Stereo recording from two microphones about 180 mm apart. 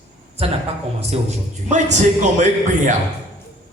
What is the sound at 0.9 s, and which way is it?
A man's voice, 35° right (ahead or behind).